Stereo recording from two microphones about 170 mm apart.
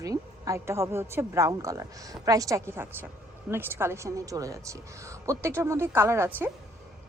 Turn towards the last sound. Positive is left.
turn(degrees=-15)  # may be behind; listen again after turning